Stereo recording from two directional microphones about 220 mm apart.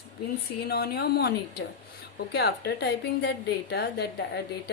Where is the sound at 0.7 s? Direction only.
45° left (ahead or behind).